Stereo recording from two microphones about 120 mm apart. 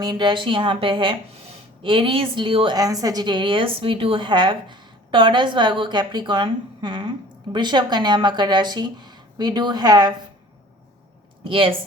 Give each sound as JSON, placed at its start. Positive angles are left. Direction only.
{"t": 0.0, "sound": "a woman's voice", "side_deg": -35}
{"t": 2.7, "sound": "a woman's voice", "side_deg": -30}
{"t": 11.4, "sound": "a woman's voice", "side_deg": -50}